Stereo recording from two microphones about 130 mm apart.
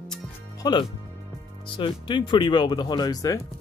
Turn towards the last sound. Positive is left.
turn(degrees=30)  # may be behind; listen again after turning